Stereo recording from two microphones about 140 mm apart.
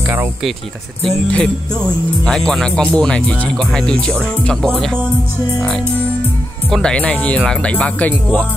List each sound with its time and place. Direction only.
1.0 s speech: 5° left (ahead or behind)
6.7 s speech: 5° left (ahead or behind)